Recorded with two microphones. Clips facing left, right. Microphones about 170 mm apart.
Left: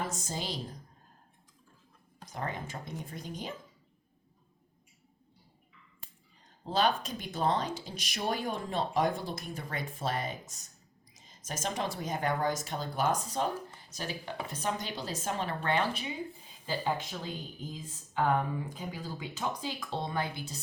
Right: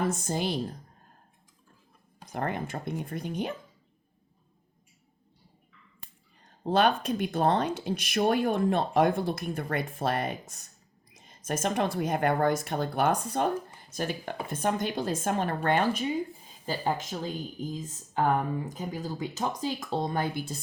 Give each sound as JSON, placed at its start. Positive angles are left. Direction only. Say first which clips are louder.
{"t": 0.1, "sound": "speech", "louder": "right 8 dB", "side_deg": -55}
{"t": 2.2, "sound": "speech", "louder": "right 6 dB", "side_deg": -60}
{"t": 6.7, "sound": "speech", "louder": "right 5 dB", "side_deg": -60}